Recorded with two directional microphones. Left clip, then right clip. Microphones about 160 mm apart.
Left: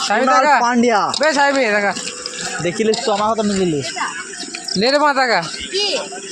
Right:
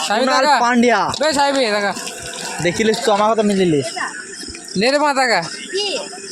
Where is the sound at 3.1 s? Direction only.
65° right (ahead or behind).